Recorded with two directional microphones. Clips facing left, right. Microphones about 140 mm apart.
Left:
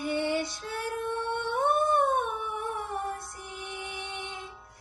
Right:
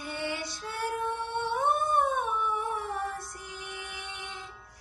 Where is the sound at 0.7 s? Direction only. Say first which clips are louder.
Right 2 dB; 55° left (ahead or behind).